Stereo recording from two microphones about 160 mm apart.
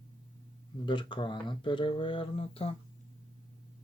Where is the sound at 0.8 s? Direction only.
30° left (ahead or behind).